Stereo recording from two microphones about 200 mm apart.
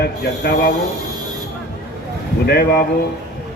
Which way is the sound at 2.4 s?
50° left (ahead or behind).